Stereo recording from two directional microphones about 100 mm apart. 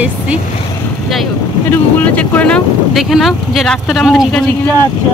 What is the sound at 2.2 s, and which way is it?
Speech, 10° left (ahead or behind).